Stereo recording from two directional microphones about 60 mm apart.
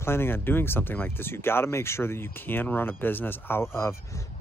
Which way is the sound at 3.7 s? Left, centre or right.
Left.